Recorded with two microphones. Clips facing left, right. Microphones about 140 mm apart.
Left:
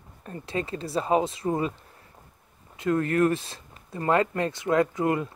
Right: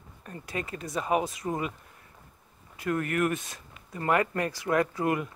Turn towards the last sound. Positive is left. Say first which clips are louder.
# left 3 dB
turn(degrees=25)  # may be behind; listen again after turning